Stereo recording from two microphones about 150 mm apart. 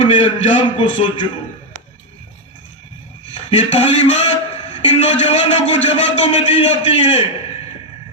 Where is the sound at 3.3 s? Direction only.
45° left (ahead or behind).